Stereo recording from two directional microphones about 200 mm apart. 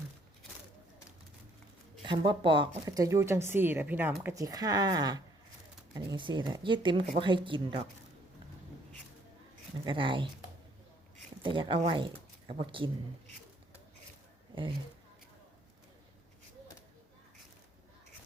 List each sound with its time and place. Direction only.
2.0 s speech: 25° right (ahead or behind)
9.8 s speech: 25° right (ahead or behind)
11.4 s speech: 25° right (ahead or behind)